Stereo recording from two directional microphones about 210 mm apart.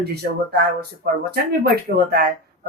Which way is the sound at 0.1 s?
50° right (ahead or behind).